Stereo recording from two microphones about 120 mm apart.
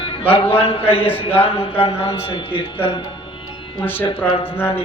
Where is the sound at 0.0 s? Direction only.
50° left (ahead or behind).